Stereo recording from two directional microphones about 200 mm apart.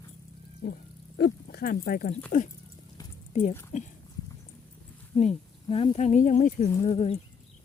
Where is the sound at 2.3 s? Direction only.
40° left (ahead or behind).